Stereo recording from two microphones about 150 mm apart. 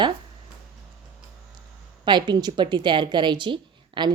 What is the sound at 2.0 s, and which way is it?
Speech, 30° right (ahead or behind).